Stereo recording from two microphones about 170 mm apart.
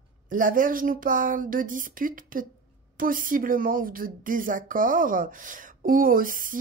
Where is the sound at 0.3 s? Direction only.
50° right (ahead or behind).